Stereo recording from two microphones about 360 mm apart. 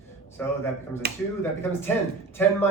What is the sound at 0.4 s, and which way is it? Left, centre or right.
Speech, centre.